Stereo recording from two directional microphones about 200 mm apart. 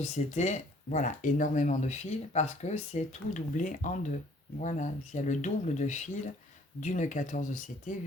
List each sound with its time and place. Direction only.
0.0 s speech: 35° left (ahead or behind)